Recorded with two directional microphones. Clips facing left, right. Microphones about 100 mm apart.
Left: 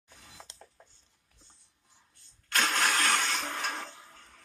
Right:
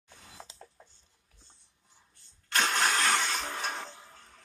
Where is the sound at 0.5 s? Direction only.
Centre (ahead or behind).